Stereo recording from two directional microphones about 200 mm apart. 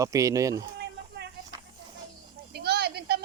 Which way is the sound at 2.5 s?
55° right (ahead or behind).